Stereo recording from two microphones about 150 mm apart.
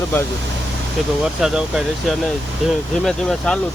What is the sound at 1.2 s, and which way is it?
Speech, 5° right (ahead or behind).